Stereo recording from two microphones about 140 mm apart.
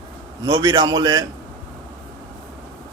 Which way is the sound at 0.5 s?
30° right (ahead or behind).